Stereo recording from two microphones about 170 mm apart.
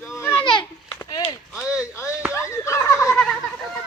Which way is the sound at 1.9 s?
15° left (ahead or behind).